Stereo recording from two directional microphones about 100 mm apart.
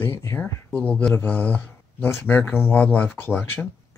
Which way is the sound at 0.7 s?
15° left (ahead or behind).